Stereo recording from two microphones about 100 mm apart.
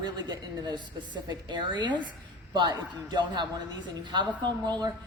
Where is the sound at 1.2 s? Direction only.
45° right (ahead or behind).